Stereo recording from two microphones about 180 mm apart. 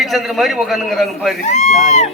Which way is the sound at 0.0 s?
Centre (ahead or behind).